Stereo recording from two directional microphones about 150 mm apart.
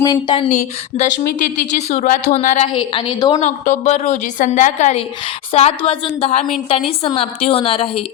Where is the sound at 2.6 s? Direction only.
30° left (ahead or behind).